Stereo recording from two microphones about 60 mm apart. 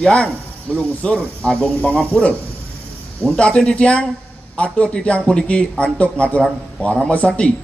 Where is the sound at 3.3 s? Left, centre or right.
Centre.